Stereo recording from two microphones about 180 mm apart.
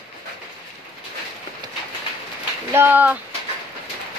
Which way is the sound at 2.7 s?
10° right (ahead or behind).